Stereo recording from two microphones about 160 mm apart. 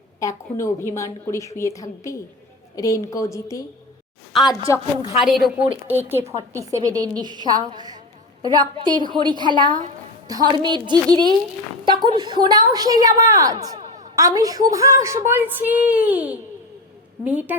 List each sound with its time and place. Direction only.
0.2 s speech: 20° left (ahead or behind)
4.3 s a woman's voice: centre (ahead or behind)